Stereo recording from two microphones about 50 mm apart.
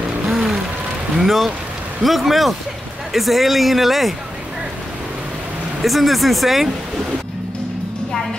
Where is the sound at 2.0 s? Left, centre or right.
Centre.